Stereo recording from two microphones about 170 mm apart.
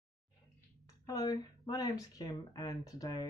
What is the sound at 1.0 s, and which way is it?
Speech, 20° left (ahead or behind).